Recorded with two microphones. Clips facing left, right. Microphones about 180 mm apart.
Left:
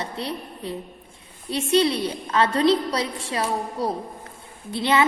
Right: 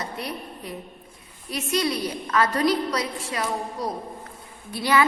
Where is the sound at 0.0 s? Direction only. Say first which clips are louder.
Left 2 dB; 30° left (ahead or behind).